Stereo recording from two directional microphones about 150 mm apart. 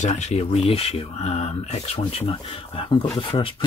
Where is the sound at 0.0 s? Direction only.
50° left (ahead or behind).